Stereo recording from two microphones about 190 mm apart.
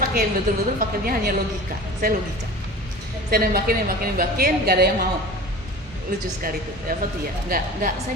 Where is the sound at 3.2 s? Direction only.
50° right (ahead or behind).